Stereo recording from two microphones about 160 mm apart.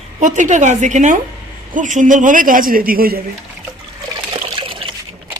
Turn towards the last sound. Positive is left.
turn(degrees=-30)  # may be behind; listen again after turning